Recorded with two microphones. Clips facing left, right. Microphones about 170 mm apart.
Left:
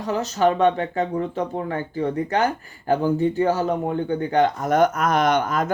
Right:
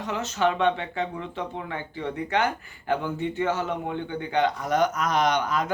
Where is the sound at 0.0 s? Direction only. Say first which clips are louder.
Left 5 dB; 35° left (ahead or behind).